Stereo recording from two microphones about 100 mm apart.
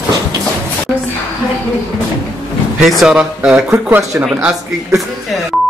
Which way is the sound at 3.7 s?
25° right (ahead or behind).